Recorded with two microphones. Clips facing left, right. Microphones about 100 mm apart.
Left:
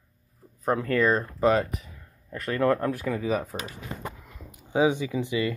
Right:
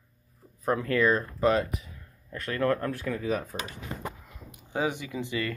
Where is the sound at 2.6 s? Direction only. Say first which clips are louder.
Left 3 dB; 15° left (ahead or behind).